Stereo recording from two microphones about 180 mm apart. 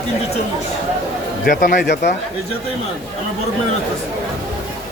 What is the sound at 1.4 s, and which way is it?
Speech, 50° left (ahead or behind).